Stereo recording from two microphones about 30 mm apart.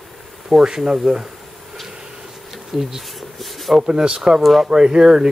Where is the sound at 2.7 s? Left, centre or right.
Centre.